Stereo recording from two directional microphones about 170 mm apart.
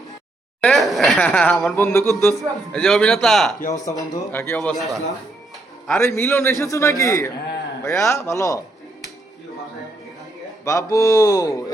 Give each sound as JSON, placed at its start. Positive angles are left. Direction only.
{"t": 0.6, "sound": "speech", "side_deg": 0}
{"t": 1.7, "sound": "a man's voice", "side_deg": 15}
{"t": 2.1, "sound": "speech", "side_deg": 0}
{"t": 3.8, "sound": "a man's voice", "side_deg": 20}
{"t": 6.0, "sound": "a man's voice", "side_deg": 15}
{"t": 10.7, "sound": "speech", "side_deg": 20}